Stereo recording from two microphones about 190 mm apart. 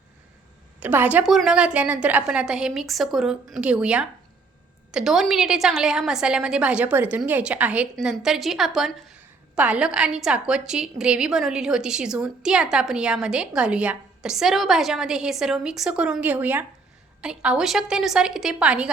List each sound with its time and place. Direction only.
0.8 s a woman's voice: 10° right (ahead or behind)